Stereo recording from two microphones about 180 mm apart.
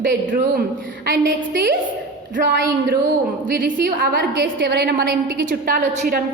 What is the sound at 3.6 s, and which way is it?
A woman's voice, 60° right (ahead or behind).